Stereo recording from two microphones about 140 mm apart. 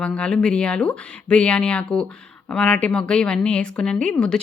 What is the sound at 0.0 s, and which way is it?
A woman's voice, 5° left (ahead or behind).